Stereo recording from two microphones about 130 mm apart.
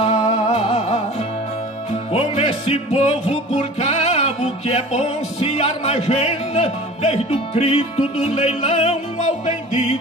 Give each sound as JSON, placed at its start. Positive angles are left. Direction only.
{"t": 0.0, "sound": "music", "side_deg": 60}
{"t": 2.1, "sound": "music", "side_deg": 50}